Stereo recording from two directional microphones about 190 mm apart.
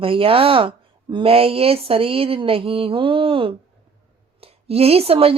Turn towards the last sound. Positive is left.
turn(degrees=-30)  # may be behind; listen again after turning